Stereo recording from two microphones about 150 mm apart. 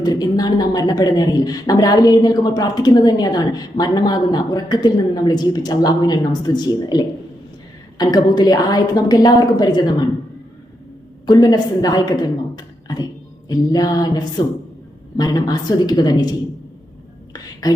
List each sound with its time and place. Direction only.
0.0 s a woman's voice: 25° left (ahead or behind)
11.3 s a woman's voice: 25° left (ahead or behind)
15.2 s a woman's voice: 25° left (ahead or behind)
17.3 s speech: 25° left (ahead or behind)